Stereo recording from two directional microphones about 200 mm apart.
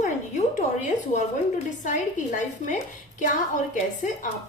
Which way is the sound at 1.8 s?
40° left (ahead or behind).